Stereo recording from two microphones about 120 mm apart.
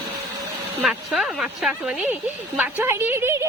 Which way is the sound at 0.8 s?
5° right (ahead or behind).